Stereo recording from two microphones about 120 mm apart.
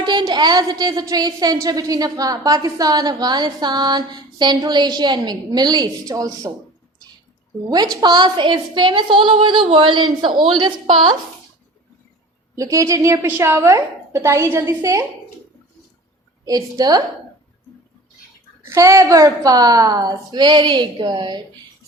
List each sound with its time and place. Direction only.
0.0 s speech: 40° right (ahead or behind)
8.0 s a woman's voice: 40° right (ahead or behind)
12.5 s a woman's voice: 25° right (ahead or behind)
16.5 s speech: 30° right (ahead or behind)
18.6 s speech: 20° right (ahead or behind)